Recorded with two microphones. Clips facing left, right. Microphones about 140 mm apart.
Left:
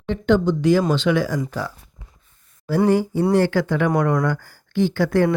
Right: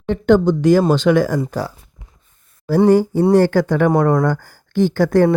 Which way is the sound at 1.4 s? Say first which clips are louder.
Right 4 dB; 35° right (ahead or behind).